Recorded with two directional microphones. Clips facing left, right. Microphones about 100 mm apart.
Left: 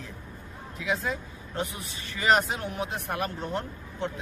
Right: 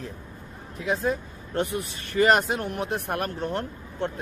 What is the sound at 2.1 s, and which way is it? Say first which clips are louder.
Speech: right 4 dB; 50° right (ahead or behind).